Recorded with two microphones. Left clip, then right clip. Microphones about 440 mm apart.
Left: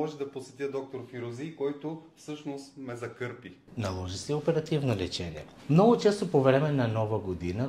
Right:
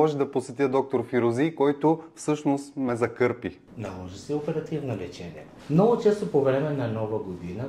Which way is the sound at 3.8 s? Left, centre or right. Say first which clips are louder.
Left 2 dB; left.